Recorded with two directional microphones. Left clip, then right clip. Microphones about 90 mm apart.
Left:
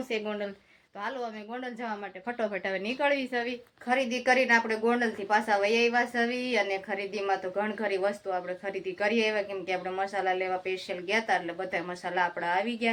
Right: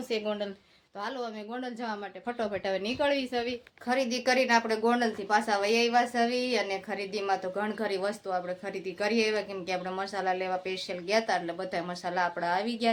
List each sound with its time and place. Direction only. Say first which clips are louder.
0.1 s a woman's voice: right 2 dB; 25° right (ahead or behind)
2.5 s a woman's voice: right 1 dB; 25° right (ahead or behind)